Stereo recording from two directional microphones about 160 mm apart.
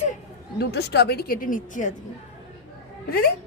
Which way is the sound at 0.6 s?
90° left.